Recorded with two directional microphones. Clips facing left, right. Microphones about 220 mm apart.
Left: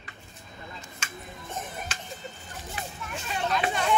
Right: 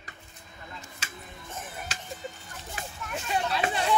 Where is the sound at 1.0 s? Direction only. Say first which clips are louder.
Left 4 dB; 35° right (ahead or behind).